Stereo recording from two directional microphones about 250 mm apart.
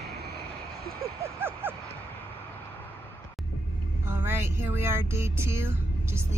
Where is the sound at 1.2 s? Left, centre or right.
Centre.